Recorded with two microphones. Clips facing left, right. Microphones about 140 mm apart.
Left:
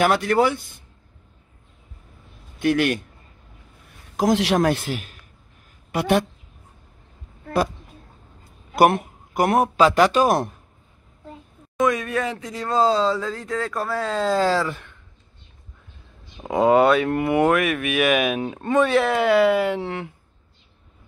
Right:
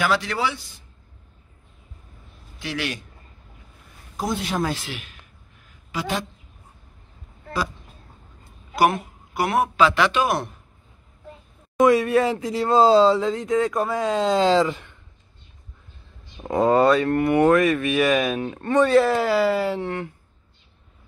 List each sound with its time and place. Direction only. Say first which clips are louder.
0.0 s a man's voice: left 5 dB; 50° left (ahead or behind)
2.6 s a man's voice: left 9 dB; 50° left (ahead or behind)
4.2 s a man's voice: left 7 dB; 90° left; by 5.1 s 45° left (ahead or behind)
5.9 s speech: left 7 dB; 60° left (ahead or behind)
8.7 s a man's voice: left 3 dB; 55° left (ahead or behind)
11.8 s speech: right 5 dB; 25° right (ahead or behind)
16.4 s speech: left 1 dB; 5° left (ahead or behind)
17.1 s speech: right 2 dB; 15° left (ahead or behind)
18.8 s speech: right 2 dB; centre (ahead or behind)
19.8 s speech: right 1 dB; 10° left (ahead or behind)